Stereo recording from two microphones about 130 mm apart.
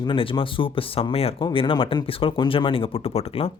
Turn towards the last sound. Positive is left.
turn(degrees=50)  # may be behind; listen again after turning